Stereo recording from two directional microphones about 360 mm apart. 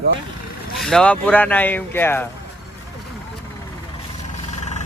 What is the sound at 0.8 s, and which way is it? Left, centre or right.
Speech, centre.